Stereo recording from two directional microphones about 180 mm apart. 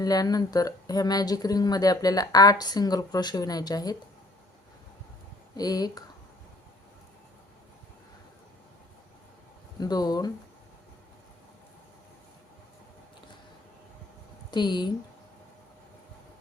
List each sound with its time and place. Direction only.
0.0 s speech: 20° left (ahead or behind)
5.5 s speech: 20° left (ahead or behind)
9.8 s speech: 20° left (ahead or behind)
14.5 s speech: 25° left (ahead or behind)